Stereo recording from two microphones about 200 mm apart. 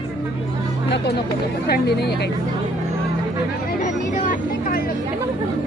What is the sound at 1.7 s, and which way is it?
Speech, 55° left (ahead or behind).